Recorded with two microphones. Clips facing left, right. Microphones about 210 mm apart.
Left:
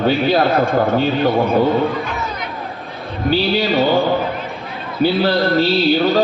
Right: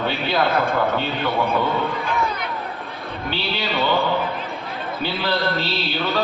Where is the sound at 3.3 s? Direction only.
40° left (ahead or behind).